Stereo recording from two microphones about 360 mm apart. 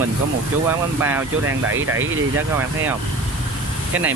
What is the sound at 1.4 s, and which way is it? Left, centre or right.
Speech, right.